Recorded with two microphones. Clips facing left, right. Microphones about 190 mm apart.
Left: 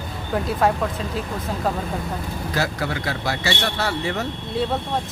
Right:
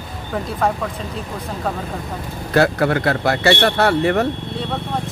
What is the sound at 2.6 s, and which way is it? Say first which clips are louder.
Speech: right 10 dB; 60° right (ahead or behind).